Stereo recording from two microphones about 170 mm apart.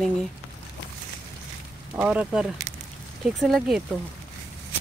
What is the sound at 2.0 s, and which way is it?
Speech, 5° right (ahead or behind).